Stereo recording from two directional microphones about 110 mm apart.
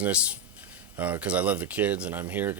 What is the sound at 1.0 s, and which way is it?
Speech, 15° right (ahead or behind).